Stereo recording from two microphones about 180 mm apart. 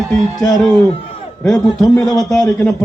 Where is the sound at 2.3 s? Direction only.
20° left (ahead or behind).